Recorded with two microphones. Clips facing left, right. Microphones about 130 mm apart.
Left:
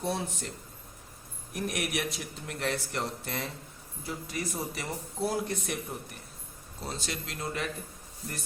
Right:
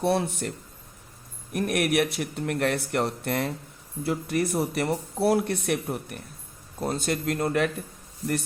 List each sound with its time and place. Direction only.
0.0 s speech: 65° right (ahead or behind)
1.5 s speech: 60° right (ahead or behind)
6.7 s speech: 55° right (ahead or behind)